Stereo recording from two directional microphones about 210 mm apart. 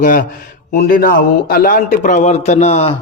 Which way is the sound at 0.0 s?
40° left (ahead or behind).